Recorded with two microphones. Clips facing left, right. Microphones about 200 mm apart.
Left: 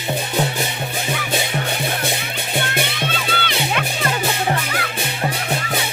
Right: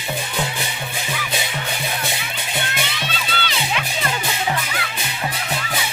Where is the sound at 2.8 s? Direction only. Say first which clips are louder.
Left 4 dB; 55° left (ahead or behind).